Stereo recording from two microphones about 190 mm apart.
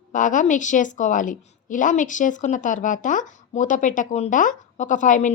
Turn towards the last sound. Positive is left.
turn(degrees=40)  # may be behind; listen again after turning